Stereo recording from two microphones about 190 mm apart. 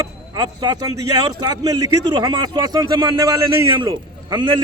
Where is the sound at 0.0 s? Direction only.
20° right (ahead or behind).